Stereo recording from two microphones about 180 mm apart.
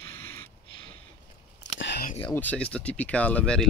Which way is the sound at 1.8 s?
75° left (ahead or behind).